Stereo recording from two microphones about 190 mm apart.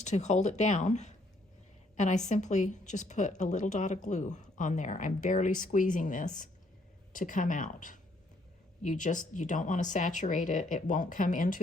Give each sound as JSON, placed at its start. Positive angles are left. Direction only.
{"t": 0.0, "sound": "a woman's voice", "side_deg": 35}